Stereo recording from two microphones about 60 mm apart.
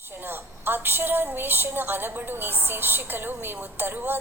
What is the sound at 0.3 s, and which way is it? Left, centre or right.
A woman's voice, right.